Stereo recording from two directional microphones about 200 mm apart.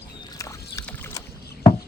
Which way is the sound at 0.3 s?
15° left (ahead or behind).